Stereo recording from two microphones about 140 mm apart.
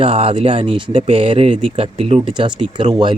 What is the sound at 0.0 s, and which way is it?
Speech, 40° right (ahead or behind).